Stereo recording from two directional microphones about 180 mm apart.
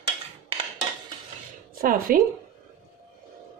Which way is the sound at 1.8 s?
55° right (ahead or behind).